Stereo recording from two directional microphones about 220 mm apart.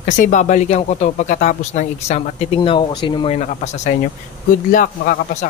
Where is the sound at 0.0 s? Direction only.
35° left (ahead or behind).